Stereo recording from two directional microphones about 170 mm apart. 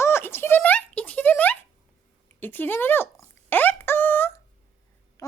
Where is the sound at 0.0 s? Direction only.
15° left (ahead or behind).